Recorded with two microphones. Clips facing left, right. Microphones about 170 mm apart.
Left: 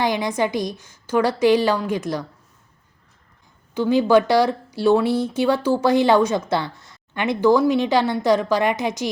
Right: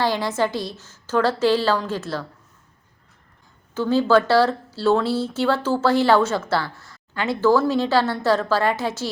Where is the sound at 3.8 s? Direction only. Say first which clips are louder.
Left 2 dB; 15° left (ahead or behind).